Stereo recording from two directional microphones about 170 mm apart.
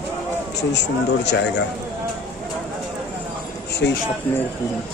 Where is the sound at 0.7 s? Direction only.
90° left.